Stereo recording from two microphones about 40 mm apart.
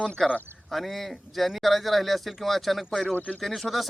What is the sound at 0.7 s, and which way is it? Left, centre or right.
A man's voice, centre.